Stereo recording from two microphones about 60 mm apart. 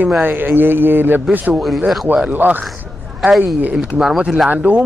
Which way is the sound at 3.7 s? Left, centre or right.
Centre.